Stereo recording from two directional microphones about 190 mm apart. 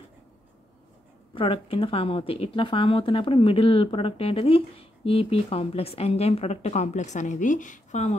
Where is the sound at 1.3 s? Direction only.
30° left (ahead or behind).